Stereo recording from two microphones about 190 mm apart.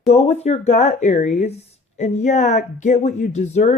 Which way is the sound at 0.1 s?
35° left (ahead or behind).